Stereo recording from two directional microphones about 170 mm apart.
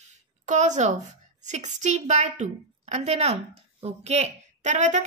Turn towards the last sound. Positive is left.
turn(degrees=-45)  # may be behind; listen again after turning